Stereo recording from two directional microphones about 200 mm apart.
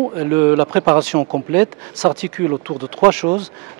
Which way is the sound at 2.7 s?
20° right (ahead or behind).